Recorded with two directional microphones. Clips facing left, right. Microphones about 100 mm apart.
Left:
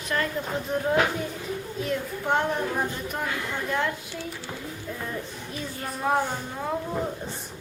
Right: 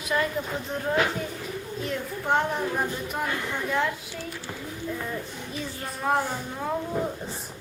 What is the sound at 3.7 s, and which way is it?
Speech, centre (ahead or behind).